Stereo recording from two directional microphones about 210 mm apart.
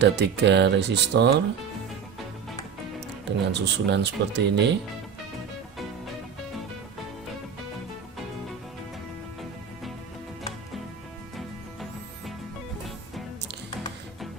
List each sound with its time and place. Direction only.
0.0 s speech: 55° right (ahead or behind)
3.2 s speech: 55° right (ahead or behind)
11.3 s music: centre (ahead or behind)